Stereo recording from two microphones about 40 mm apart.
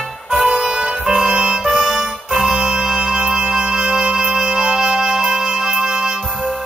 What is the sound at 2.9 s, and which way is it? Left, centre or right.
Music, right.